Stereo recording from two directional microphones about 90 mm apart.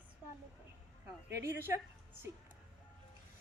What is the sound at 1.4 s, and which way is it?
Speech, 30° right (ahead or behind).